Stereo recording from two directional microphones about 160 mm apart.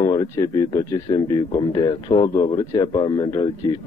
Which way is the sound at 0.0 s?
25° left (ahead or behind).